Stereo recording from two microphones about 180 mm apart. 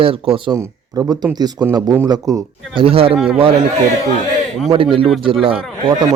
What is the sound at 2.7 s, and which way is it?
Speech, 30° right (ahead or behind).